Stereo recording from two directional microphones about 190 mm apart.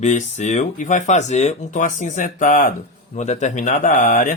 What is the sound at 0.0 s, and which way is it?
Speech, 40° left (ahead or behind).